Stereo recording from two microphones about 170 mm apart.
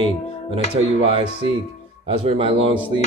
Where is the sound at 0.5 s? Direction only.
35° right (ahead or behind).